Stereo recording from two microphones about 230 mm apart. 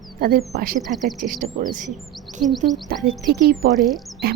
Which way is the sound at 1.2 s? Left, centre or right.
Right.